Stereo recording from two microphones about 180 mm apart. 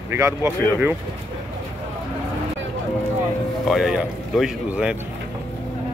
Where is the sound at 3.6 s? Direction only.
Centre (ahead or behind).